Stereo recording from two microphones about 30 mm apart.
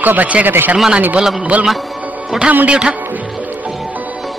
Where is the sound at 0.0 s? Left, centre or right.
Right.